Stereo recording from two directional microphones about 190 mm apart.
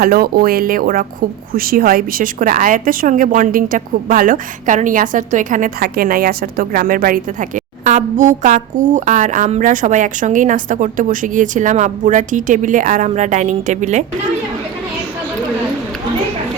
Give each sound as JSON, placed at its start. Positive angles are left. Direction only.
{"t": 0.0, "sound": "a woman's voice", "side_deg": -50}